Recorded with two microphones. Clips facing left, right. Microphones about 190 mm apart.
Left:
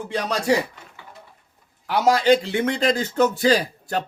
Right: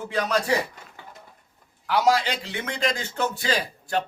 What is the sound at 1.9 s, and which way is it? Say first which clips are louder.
A man's voice: left 5 dB; 45° left (ahead or behind).